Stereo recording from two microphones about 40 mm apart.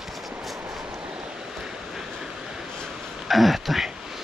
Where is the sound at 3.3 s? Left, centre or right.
Centre.